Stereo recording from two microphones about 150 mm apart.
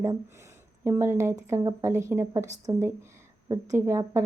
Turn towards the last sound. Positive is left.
turn(degrees=-20)  # may be behind; listen again after turning